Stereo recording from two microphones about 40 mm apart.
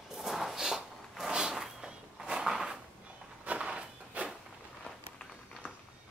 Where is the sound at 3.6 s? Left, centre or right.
Right.